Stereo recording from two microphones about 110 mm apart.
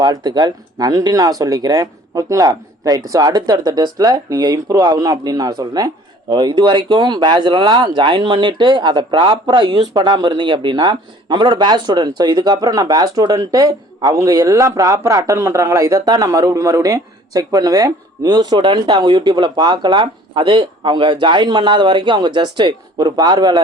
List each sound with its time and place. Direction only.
0.0 s speech: 40° right (ahead or behind)